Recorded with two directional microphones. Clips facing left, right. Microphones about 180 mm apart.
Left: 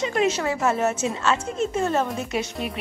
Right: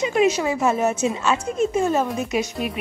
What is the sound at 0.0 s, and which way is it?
A woman's voice, 15° right (ahead or behind).